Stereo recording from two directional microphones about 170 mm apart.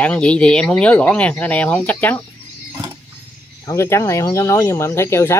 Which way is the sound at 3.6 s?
15° left (ahead or behind).